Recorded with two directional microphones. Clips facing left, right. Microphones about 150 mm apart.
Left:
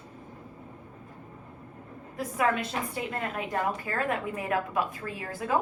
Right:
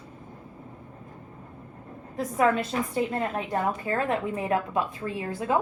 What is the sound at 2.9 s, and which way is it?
A woman's voice, 30° right (ahead or behind).